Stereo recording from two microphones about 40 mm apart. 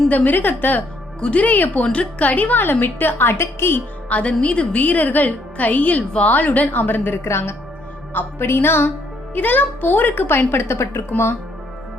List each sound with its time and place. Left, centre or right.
0.1 s a woman's voice: left
1.2 s a woman's voice: left
1.8 s a woman's voice: left
2.8 s a woman's voice: left
4.1 s a woman's voice: left
4.8 s a woman's voice: left
8.4 s speech: left
9.3 s a woman's voice: left